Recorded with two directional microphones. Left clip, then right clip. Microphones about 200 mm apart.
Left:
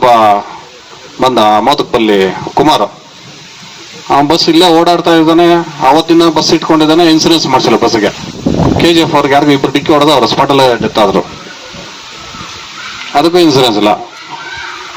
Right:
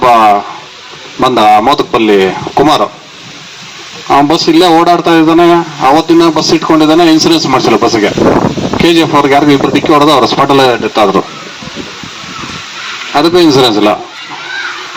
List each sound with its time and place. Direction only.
0.0 s a sound: 35° right (ahead or behind)
1.2 s a man's voice: 35° right (ahead or behind)
4.1 s a man's voice: 35° right (ahead or behind)
13.1 s a man's voice: 35° right (ahead or behind)